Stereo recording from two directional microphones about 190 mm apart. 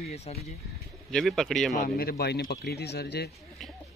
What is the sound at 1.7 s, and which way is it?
Speech, 50° left (ahead or behind).